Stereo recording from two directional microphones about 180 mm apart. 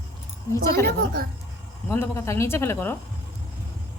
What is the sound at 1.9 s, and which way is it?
A woman's voice, 15° left (ahead or behind).